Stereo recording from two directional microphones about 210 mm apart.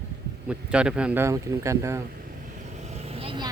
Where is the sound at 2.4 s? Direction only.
35° right (ahead or behind).